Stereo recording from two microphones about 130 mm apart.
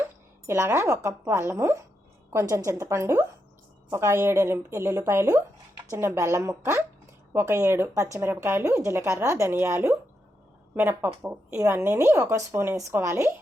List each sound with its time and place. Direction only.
0.4 s speech: 20° right (ahead or behind)